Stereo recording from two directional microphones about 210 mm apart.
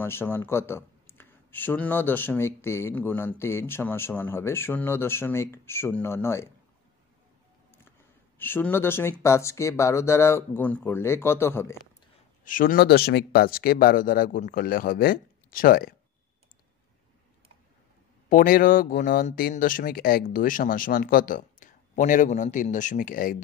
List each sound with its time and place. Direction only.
0.0 s speech: 10° left (ahead or behind)
8.4 s speech: 10° left (ahead or behind)
12.4 s speech: 40° left (ahead or behind)
18.3 s speech: 40° left (ahead or behind)